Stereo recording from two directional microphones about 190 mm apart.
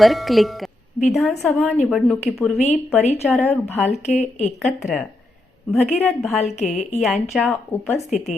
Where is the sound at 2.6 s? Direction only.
35° left (ahead or behind).